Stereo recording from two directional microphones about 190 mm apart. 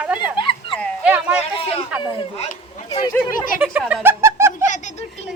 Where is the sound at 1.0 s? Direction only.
5° right (ahead or behind).